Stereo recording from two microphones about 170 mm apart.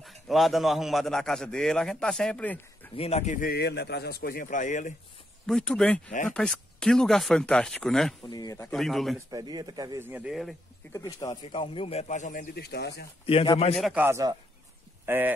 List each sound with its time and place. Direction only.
0.0 s a man's voice: centre (ahead or behind)
3.0 s a man's voice: 40° left (ahead or behind)
3.4 s a man's voice: 75° left (ahead or behind); by 4.9 s 45° left (ahead or behind)
5.5 s a man's voice: 5° left (ahead or behind)
8.3 s speech: 25° left (ahead or behind)
8.6 s a man's voice: centre (ahead or behind)
9.3 s speech: 25° right (ahead or behind); by 10.5 s 5° right (ahead or behind)
10.9 s a man's voice: 20° left (ahead or behind); by 12.4 s 50° left (ahead or behind)
12.5 s speech: 70° left (ahead or behind)
13.2 s a man's voice: 35° left (ahead or behind)
13.7 s a man's voice: centre (ahead or behind)
14.0 s speech: 15° right (ahead or behind)